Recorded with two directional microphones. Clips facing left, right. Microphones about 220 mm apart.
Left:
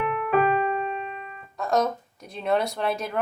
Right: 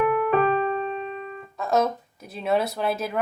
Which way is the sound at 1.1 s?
35° right (ahead or behind).